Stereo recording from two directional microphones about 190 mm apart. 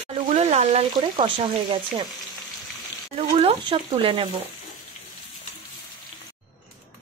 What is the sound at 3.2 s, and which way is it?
Speech, 30° right (ahead or behind).